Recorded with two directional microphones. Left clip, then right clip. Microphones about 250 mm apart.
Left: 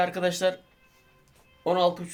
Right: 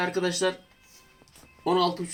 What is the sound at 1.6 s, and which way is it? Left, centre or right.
Speech, left.